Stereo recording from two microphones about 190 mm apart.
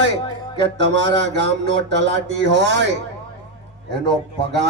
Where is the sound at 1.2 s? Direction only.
65° right (ahead or behind).